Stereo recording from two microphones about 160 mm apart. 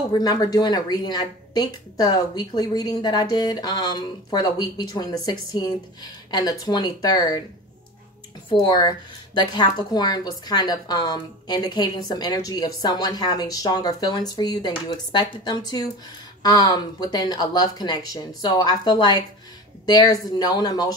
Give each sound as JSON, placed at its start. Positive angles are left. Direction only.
{"t": 0.1, "sound": "a woman's voice", "side_deg": 25}
{"t": 8.5, "sound": "a woman's voice", "side_deg": 30}